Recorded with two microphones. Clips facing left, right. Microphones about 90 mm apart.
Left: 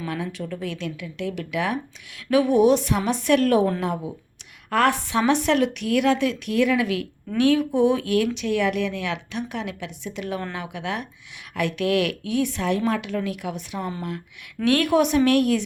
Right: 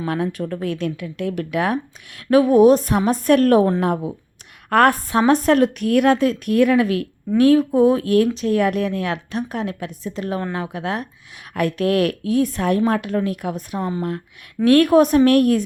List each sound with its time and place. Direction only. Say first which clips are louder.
0.1 s a woman's voice: right 9 dB; 50° right (ahead or behind)